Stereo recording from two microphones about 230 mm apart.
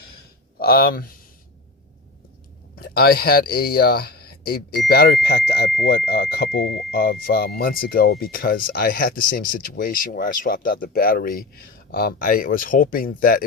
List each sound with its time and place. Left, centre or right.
0.6 s speech: left
2.7 s speech: left